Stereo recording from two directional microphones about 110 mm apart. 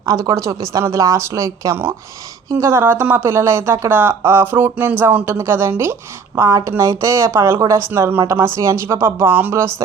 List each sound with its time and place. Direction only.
0.0 s speech: 35° right (ahead or behind)